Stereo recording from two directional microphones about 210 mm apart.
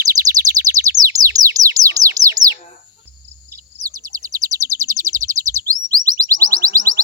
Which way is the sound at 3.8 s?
15° right (ahead or behind).